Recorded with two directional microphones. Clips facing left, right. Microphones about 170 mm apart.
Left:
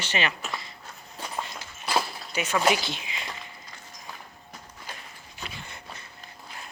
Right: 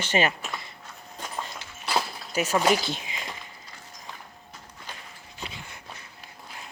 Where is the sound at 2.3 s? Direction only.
40° right (ahead or behind).